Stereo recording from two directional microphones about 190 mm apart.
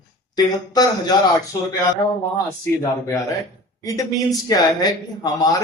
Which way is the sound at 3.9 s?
20° left (ahead or behind).